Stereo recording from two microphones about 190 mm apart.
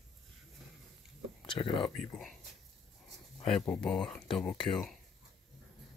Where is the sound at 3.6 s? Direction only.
5° left (ahead or behind).